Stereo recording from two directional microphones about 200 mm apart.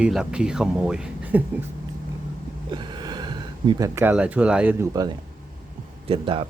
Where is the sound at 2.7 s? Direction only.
20° right (ahead or behind).